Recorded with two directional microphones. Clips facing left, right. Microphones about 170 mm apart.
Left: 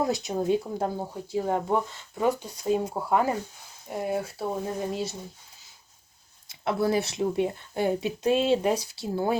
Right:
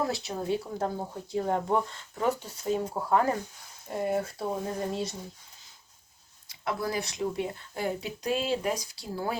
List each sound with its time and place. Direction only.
0.0 s speech: 20° left (ahead or behind)
0.9 s speech: 5° left (ahead or behind)
6.5 s speech: 25° left (ahead or behind)